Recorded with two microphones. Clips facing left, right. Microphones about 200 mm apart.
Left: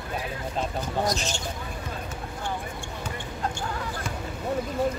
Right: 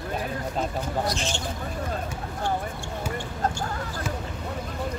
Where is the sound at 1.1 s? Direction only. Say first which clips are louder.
Even; 40° left (ahead or behind).